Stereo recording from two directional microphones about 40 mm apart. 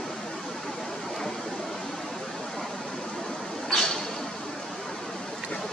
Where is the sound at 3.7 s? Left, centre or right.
Centre.